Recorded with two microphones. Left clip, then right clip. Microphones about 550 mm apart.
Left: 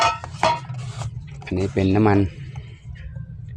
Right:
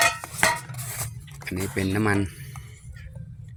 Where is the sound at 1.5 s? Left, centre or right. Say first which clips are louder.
Left 6 dB; right.